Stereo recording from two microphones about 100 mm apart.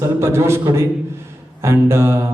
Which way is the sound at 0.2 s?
25° right (ahead or behind).